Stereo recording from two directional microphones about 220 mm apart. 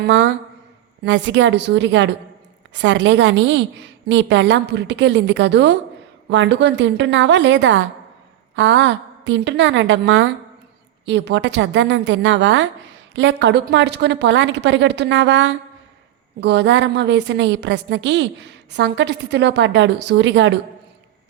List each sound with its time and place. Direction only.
0.0 s a woman's voice: 55° right (ahead or behind)